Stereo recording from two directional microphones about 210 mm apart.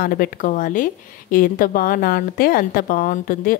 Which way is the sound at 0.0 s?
45° left (ahead or behind).